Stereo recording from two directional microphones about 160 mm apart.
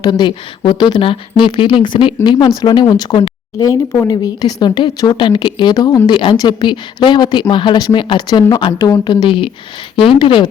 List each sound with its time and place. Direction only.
0.0 s speech: 25° left (ahead or behind)